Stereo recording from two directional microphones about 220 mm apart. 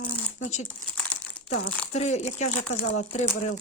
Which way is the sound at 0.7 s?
5° left (ahead or behind).